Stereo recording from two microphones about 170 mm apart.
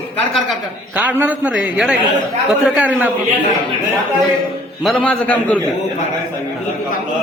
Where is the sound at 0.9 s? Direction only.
10° right (ahead or behind).